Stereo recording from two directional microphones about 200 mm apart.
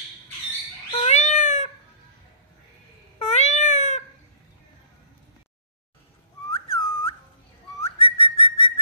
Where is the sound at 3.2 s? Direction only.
35° left (ahead or behind).